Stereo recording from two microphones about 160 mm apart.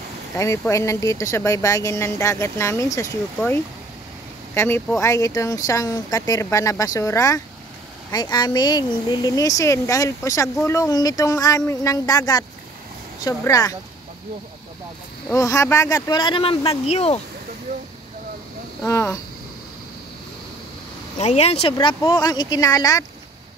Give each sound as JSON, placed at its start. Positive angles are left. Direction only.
{"t": 0.4, "sound": "speech", "side_deg": 20}
{"t": 15.3, "sound": "speech", "side_deg": 20}
{"t": 18.9, "sound": "speech", "side_deg": 20}
{"t": 21.2, "sound": "speech", "side_deg": 40}
{"t": 21.7, "sound": "speech", "side_deg": 25}